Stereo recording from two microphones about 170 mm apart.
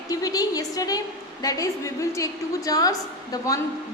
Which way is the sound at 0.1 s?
20° left (ahead or behind).